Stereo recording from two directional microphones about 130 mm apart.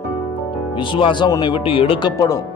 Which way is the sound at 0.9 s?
40° left (ahead or behind).